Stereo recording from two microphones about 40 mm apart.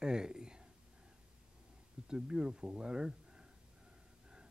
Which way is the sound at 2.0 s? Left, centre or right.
Centre.